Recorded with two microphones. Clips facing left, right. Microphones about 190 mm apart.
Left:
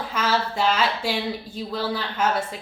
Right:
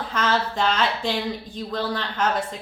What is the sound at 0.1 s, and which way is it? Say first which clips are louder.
A woman's voice: right 1 dB; 10° left (ahead or behind).